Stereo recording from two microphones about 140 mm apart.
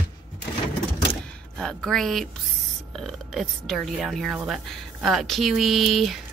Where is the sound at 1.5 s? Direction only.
Centre (ahead or behind).